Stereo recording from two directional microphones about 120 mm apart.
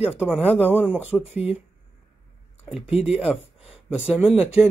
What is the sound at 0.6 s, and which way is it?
Speech, 15° right (ahead or behind).